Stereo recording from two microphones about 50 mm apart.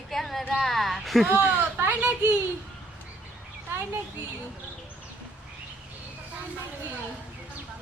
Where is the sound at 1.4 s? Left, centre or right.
Centre.